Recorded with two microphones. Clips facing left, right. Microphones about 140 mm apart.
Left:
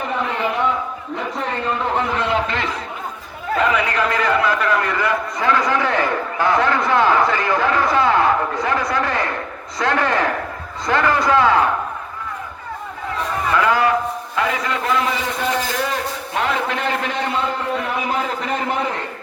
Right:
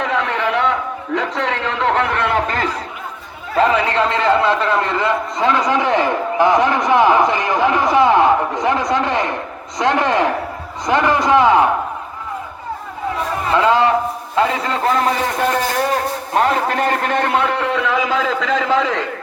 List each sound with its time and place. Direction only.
0.0 s a sound: 90° right; by 2.4 s 60° right (ahead or behind)
2.5 s speech: 40° right (ahead or behind)
3.6 s a man's voice: 30° right (ahead or behind)
13.5 s a man's voice: 25° right (ahead or behind); by 19.0 s 90° right